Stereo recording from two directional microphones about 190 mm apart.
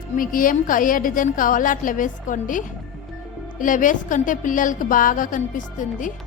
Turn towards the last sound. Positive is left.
turn(degrees=40)  # may be behind; listen again after turning